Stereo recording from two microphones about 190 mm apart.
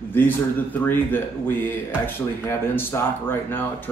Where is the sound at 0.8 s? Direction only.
10° left (ahead or behind).